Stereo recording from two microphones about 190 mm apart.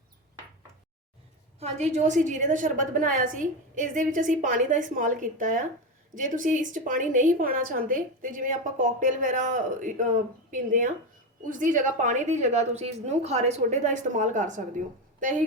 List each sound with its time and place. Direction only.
1.5 s a woman's voice: 35° right (ahead or behind)